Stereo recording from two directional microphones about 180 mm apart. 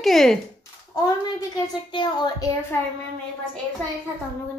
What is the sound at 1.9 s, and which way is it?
Child singing, 25° left (ahead or behind).